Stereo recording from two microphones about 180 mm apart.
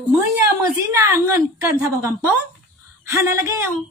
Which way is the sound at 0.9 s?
15° right (ahead or behind).